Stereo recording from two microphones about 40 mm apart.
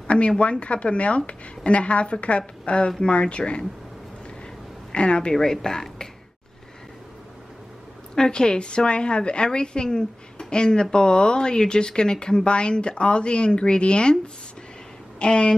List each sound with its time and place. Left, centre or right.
0.4 s speech: left
4.9 s speech: left
5.3 s a woman's voice: centre
8.1 s speech: centre